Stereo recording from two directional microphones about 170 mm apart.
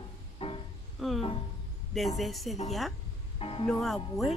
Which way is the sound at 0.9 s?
Centre (ahead or behind).